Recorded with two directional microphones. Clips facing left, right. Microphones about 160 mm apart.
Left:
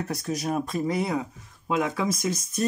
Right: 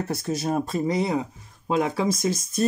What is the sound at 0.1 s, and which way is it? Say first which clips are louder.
Speech: right 2 dB; 30° right (ahead or behind).